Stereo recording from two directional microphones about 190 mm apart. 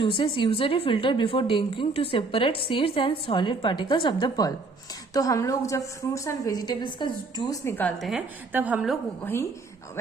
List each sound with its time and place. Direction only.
0.0 s a woman's voice: 25° left (ahead or behind); by 9.0 s 5° right (ahead or behind)
9.2 s a woman's voice: 10° left (ahead or behind)